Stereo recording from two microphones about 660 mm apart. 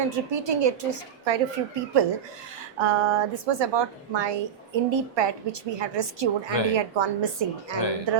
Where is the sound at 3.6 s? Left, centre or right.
Right.